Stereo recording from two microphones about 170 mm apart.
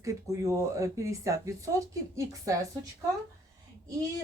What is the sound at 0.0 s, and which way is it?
Speech, 20° right (ahead or behind).